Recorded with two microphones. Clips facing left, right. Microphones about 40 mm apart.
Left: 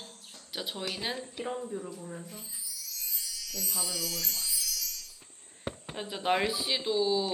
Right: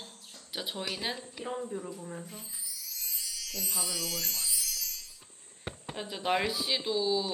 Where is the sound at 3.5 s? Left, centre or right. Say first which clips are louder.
Even; right.